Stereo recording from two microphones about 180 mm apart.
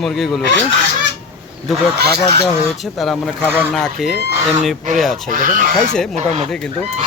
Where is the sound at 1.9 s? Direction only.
65° right (ahead or behind).